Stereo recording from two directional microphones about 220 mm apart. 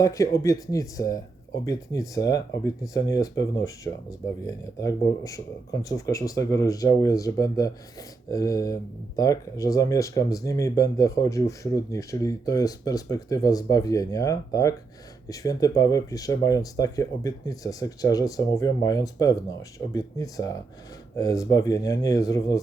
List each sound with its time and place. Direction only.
0.0 s speech: 15° left (ahead or behind)